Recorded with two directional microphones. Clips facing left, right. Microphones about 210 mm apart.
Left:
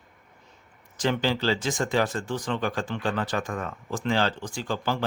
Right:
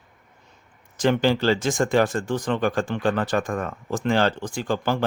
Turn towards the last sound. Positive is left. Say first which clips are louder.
# right 4 dB
turn(degrees=-55)  # may be behind; listen again after turning